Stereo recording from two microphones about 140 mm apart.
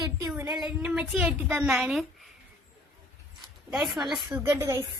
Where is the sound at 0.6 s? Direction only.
10° right (ahead or behind).